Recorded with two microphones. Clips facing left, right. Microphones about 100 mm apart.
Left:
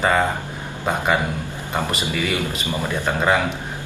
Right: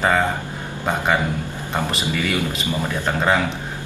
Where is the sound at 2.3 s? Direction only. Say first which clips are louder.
Right 1 dB; 20° left (ahead or behind).